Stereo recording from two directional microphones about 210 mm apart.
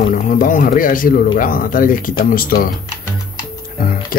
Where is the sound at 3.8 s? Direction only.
40° left (ahead or behind).